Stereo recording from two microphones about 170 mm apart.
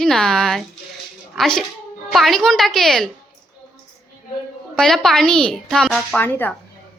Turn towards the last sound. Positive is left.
turn(degrees=10)  # may be behind; listen again after turning